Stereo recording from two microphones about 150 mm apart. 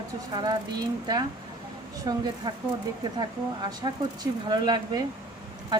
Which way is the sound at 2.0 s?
25° right (ahead or behind).